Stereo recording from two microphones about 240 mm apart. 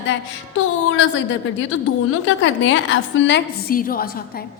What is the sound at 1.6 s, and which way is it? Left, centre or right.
A woman's voice, left.